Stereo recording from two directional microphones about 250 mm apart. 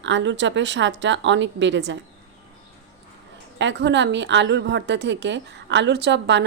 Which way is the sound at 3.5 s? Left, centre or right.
Right.